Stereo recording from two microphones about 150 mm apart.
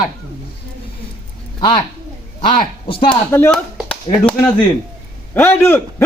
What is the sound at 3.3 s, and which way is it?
A man's voice, 15° left (ahead or behind).